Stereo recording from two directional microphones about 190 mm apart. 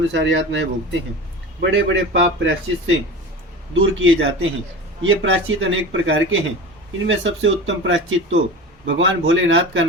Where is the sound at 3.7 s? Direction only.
90° right.